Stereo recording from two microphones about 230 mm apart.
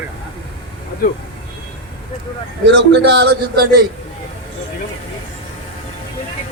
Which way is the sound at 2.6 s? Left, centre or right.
Right.